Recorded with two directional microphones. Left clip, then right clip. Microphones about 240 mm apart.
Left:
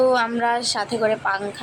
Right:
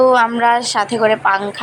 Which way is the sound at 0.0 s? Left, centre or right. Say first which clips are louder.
Right 7 dB; centre.